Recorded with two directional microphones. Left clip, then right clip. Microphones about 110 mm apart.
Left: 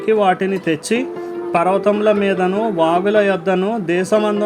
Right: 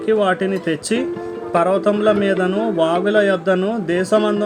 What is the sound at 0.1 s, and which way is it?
A man's voice, 30° left (ahead or behind).